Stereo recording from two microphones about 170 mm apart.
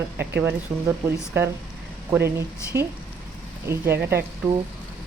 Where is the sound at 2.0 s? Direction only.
15° right (ahead or behind).